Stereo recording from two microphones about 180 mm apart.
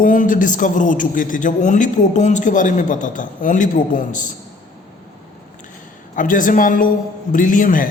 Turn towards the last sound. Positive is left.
turn(degrees=50)  # may be behind; listen again after turning